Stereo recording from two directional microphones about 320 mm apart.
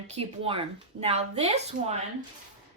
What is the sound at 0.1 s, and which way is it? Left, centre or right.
A woman's voice, centre.